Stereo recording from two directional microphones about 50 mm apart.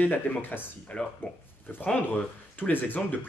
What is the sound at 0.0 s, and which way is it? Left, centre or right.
Speech, left.